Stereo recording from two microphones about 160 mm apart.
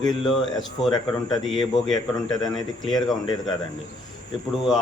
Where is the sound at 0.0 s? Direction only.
Centre (ahead or behind).